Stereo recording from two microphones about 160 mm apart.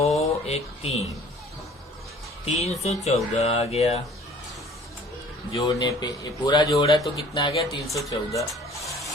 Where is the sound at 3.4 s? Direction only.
40° left (ahead or behind).